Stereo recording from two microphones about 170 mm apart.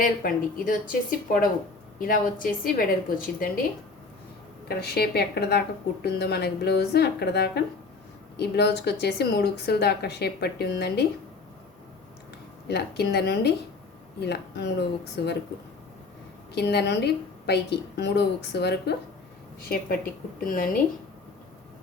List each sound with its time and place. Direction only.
0.2 s a woman's voice: 55° left (ahead or behind)
4.8 s a woman's voice: 70° left (ahead or behind)
12.6 s a woman's voice: 75° left (ahead or behind)
16.6 s a woman's voice: 75° left (ahead or behind)
19.6 s a woman's voice: 60° left (ahead or behind)